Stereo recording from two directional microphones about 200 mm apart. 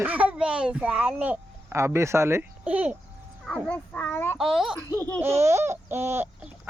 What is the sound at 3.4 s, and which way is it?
Speech, 5° left (ahead or behind).